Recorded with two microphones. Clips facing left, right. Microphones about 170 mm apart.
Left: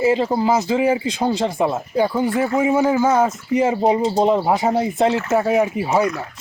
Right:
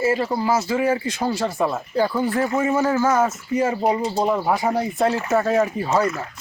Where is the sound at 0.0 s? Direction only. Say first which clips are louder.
Left 4 dB; 20° left (ahead or behind).